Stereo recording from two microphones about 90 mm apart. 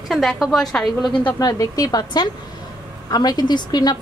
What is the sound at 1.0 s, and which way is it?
Speech, 60° left (ahead or behind).